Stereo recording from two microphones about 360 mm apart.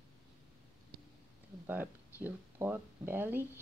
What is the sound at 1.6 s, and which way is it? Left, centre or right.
Speech, centre.